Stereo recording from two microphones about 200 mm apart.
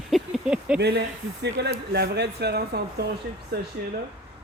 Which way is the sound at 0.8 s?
55° right (ahead or behind).